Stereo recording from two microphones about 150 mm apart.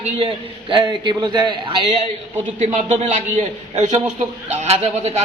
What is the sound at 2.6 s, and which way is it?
A man's voice, 50° right (ahead or behind).